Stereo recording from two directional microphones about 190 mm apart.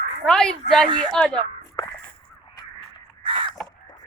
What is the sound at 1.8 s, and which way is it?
Whip, 20° left (ahead or behind).